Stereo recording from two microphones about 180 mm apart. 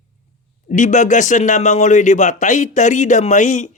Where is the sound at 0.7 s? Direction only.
45° left (ahead or behind).